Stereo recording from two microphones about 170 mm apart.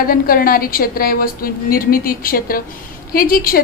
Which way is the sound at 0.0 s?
60° left (ahead or behind).